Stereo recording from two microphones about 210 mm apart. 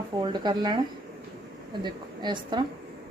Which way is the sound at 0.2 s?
20° right (ahead or behind).